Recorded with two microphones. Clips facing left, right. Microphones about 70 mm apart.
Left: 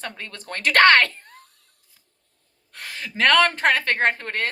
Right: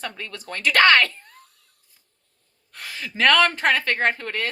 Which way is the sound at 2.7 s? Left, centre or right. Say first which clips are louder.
Even; left.